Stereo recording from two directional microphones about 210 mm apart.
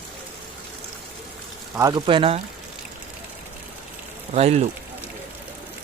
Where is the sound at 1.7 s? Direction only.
20° right (ahead or behind).